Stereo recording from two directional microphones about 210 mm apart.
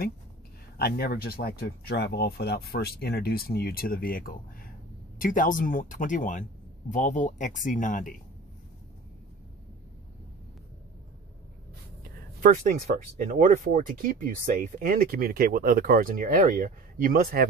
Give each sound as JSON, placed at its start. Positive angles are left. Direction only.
{"t": 0.7, "sound": "speech", "side_deg": 50}
{"t": 12.0, "sound": "speech", "side_deg": -40}